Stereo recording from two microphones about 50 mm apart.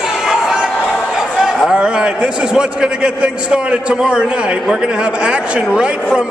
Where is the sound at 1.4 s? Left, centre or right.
Centre.